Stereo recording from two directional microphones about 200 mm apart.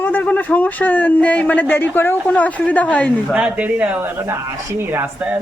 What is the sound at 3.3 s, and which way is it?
Speech, 5° right (ahead or behind).